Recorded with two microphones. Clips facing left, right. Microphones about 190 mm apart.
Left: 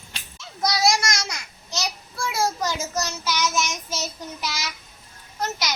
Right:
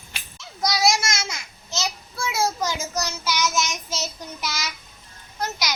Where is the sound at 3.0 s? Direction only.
15° right (ahead or behind).